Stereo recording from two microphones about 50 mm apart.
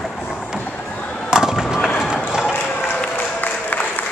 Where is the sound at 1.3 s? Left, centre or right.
Centre.